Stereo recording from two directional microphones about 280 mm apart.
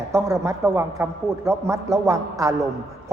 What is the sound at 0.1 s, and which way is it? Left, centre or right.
A man's voice, centre.